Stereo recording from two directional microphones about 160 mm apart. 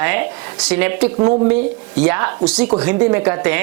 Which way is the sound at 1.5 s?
10° right (ahead or behind).